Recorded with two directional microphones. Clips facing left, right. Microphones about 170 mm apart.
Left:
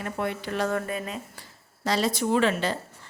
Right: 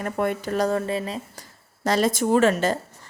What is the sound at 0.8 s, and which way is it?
Speech, 25° right (ahead or behind).